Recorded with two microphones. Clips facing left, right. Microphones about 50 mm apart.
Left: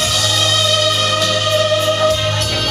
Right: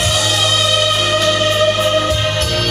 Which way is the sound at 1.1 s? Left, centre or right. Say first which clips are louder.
Right 2 dB; right.